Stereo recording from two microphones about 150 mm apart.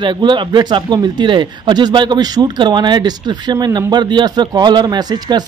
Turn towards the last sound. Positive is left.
turn(degrees=-25)  # may be behind; listen again after turning